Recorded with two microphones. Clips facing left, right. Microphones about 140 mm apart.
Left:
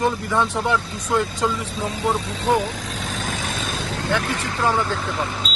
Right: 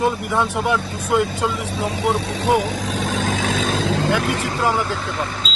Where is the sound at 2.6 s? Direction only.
90° right.